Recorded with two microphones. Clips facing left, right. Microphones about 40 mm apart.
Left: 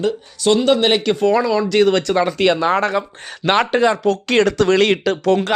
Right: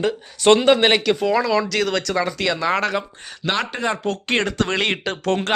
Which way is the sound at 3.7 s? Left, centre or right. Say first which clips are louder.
Left 9 dB; left.